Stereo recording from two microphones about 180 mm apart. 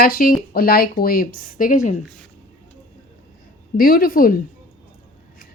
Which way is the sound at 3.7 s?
55° left (ahead or behind).